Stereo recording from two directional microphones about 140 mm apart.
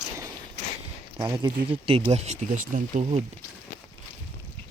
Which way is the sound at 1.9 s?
40° right (ahead or behind).